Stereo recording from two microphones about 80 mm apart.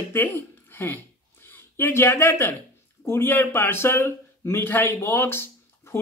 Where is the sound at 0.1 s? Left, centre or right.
Left.